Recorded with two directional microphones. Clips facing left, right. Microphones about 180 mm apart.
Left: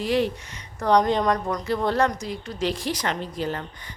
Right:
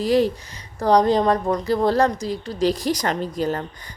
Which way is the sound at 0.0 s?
40° right (ahead or behind).